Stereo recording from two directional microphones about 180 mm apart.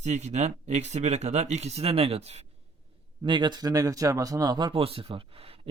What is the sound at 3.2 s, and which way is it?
Speech, 25° right (ahead or behind).